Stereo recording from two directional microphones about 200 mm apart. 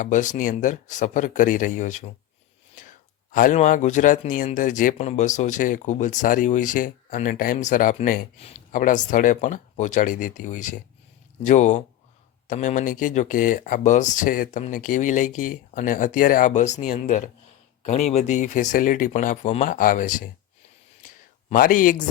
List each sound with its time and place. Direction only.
0.0 s speech: 40° left (ahead or behind)
2.8 s whispering: 40° left (ahead or behind)
3.3 s speech: 40° left (ahead or behind)
21.5 s speech: 45° left (ahead or behind)